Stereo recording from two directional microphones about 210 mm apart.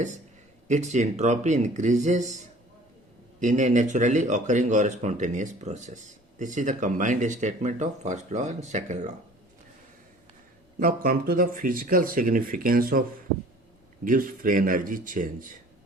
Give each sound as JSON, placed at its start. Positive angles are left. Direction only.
{"t": 0.7, "sound": "speech", "side_deg": -35}
{"t": 3.4, "sound": "speech", "side_deg": -35}
{"t": 10.8, "sound": "speech", "side_deg": -45}